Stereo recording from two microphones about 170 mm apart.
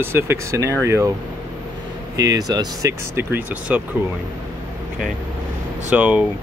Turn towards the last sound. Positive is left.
turn(degrees=-10)  # may be behind; listen again after turning